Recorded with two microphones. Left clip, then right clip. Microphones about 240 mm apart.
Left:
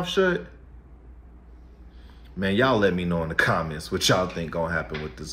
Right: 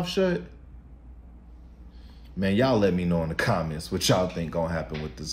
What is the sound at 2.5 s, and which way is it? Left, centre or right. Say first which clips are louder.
Speech: left 2 dB; centre.